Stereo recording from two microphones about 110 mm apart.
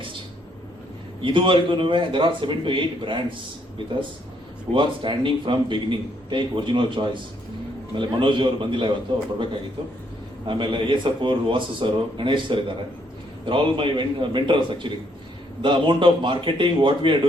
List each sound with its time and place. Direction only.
1.2 s a man's voice: 50° right (ahead or behind)
4.7 s a man's voice: 50° right (ahead or behind)
10.4 s a man's voice: 50° right (ahead or behind)